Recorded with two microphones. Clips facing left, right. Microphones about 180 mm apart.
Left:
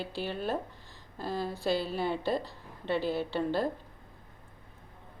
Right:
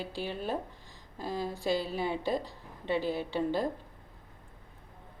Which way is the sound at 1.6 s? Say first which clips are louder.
Left 1 dB; centre (ahead or behind).